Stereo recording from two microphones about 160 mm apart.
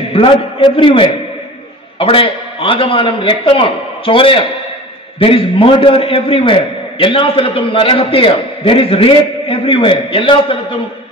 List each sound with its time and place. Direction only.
0.1 s a man's voice: 30° left (ahead or behind)